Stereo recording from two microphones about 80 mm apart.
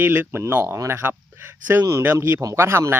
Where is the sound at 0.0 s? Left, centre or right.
Right.